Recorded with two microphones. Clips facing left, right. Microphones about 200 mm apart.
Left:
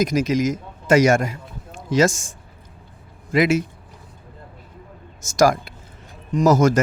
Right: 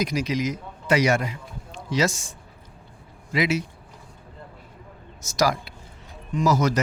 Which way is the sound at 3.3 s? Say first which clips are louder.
Left 6 dB; 50° left (ahead or behind).